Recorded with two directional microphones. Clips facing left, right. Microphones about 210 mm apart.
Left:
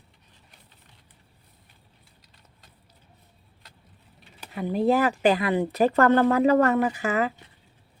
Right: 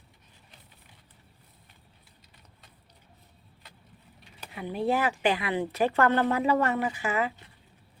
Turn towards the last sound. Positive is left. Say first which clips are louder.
# left 5 dB
turn(degrees=40)  # may be behind; listen again after turning